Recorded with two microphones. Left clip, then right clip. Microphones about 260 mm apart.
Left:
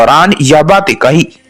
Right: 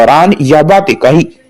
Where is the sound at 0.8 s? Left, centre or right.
Left.